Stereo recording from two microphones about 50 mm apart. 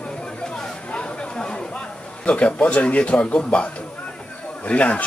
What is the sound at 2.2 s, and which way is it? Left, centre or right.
Speech, left.